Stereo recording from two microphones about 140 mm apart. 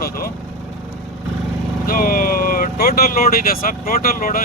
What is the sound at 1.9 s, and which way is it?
Speech, 90° left.